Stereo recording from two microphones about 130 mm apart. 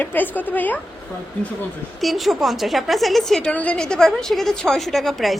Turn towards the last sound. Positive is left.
turn(degrees=0)  # may be behind; listen again after turning